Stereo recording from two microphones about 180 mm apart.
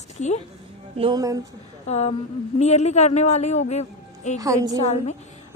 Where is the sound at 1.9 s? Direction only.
35° left (ahead or behind).